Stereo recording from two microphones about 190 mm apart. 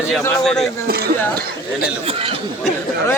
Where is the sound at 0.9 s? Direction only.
55° right (ahead or behind).